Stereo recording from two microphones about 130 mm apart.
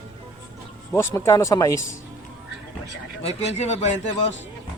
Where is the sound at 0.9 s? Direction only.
20° left (ahead or behind).